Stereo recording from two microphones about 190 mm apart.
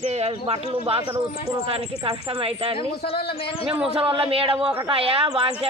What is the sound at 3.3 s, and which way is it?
Speech, 30° left (ahead or behind).